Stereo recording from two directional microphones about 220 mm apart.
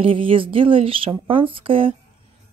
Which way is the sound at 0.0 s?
25° right (ahead or behind).